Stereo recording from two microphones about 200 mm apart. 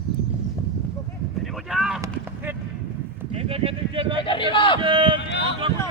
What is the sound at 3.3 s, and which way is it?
Sheep, 30° right (ahead or behind).